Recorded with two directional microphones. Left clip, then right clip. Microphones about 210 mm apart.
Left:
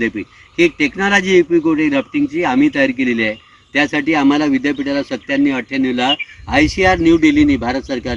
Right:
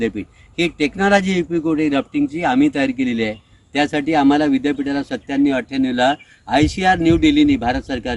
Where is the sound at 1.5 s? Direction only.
30° right (ahead or behind).